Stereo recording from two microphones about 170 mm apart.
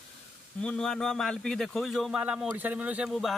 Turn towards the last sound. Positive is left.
turn(degrees=0)  # may be behind; listen again after turning